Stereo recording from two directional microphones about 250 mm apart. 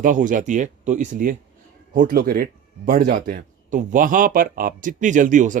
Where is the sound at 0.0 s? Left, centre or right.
Right.